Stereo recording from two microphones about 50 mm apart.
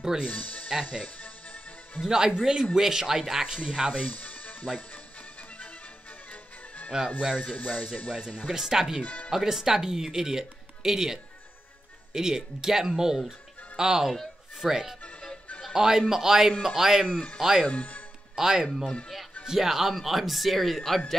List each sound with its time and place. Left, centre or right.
0.0 s speech: centre
0.3 s speech: left
2.0 s speech: centre
3.9 s music: left
6.9 s speech: centre
7.3 s speech: left
8.3 s speech: centre
9.0 s speech: left
9.3 s speech: centre
17.6 s speech: left
18.3 s speech: centre